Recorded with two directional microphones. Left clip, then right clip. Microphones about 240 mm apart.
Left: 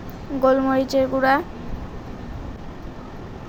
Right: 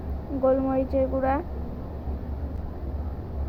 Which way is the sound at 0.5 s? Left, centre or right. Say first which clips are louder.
Left 5 dB; left.